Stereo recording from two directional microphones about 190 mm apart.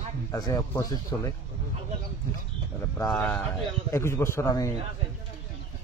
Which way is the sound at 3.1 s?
5° left (ahead or behind).